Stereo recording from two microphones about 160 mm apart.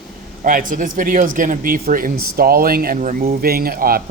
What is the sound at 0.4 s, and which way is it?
Speech, 55° right (ahead or behind).